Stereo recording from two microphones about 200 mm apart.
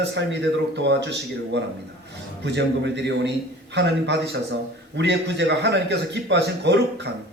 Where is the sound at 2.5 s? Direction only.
60° right (ahead or behind).